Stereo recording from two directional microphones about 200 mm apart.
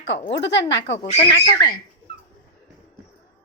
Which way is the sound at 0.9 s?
30° left (ahead or behind).